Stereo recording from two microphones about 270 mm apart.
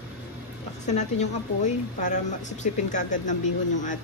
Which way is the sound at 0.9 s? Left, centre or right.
Left.